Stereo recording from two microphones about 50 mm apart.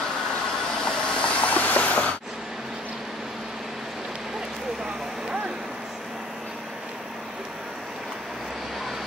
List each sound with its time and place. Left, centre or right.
0.8 s train: left